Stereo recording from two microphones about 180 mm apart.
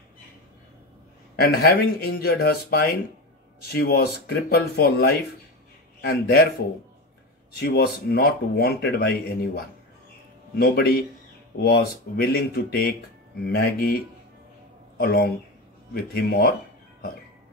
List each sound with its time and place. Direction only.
1.4 s speech: 55° left (ahead or behind)
5.9 s a man's voice: 55° left (ahead or behind)
7.5 s speech: 60° left (ahead or behind)
15.0 s speech: 55° left (ahead or behind)